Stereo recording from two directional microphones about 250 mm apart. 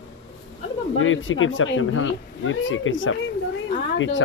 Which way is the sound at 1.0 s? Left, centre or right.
Left.